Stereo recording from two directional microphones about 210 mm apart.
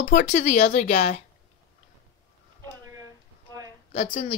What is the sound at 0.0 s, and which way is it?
Speech, 35° left (ahead or behind).